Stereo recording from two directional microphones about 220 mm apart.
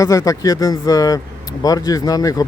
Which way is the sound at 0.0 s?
15° left (ahead or behind).